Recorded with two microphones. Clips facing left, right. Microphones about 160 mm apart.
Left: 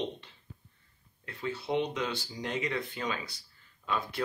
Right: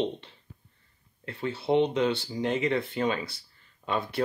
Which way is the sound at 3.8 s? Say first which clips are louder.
Right 3 dB; 45° right (ahead or behind).